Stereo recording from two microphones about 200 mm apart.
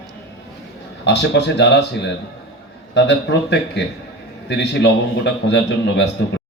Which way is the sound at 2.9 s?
60° left (ahead or behind).